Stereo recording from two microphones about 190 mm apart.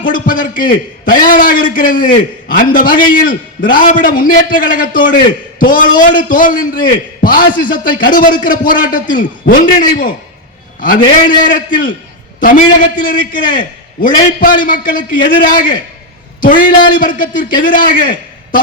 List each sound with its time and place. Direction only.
0.0 s a man's voice: 45° left (ahead or behind)